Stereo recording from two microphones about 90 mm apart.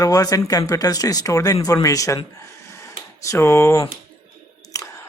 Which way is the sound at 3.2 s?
30° left (ahead or behind).